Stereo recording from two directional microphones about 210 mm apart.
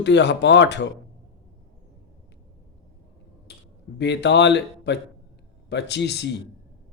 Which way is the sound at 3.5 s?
55° left (ahead or behind).